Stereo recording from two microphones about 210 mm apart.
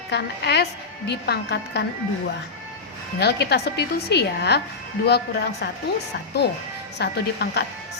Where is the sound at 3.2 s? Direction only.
50° left (ahead or behind).